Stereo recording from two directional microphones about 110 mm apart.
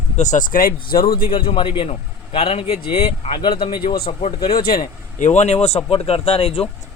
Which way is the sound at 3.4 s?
50° left (ahead or behind).